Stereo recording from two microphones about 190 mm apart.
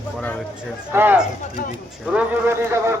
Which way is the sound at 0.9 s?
10° right (ahead or behind).